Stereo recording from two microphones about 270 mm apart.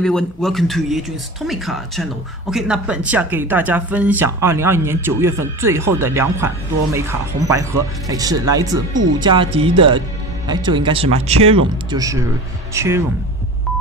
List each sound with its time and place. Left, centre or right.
0.0 s a man's voice: centre